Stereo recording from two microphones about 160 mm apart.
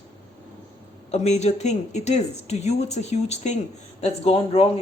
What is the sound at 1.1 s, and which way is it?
Speech, 45° left (ahead or behind).